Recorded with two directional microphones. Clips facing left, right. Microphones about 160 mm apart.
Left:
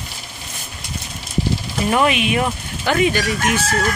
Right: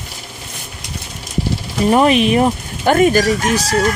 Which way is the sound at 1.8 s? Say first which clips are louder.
Right 6 dB; 35° right (ahead or behind).